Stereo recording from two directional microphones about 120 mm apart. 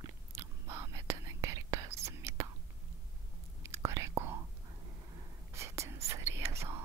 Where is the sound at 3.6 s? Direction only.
25° right (ahead or behind).